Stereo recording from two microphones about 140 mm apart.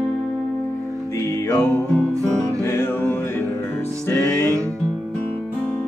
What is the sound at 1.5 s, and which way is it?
Music, 10° left (ahead or behind).